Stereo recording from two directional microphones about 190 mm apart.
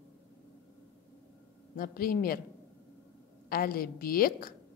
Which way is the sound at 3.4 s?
50° left (ahead or behind).